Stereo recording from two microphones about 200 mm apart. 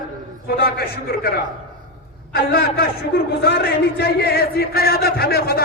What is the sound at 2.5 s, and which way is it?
A man's voice, 50° left (ahead or behind).